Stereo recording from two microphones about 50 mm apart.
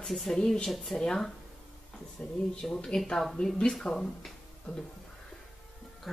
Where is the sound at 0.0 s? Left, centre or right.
Centre.